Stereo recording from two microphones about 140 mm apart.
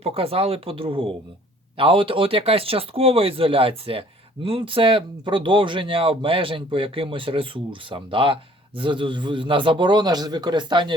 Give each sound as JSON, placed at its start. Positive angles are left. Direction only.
{"t": 0.0, "sound": "speech", "side_deg": -45}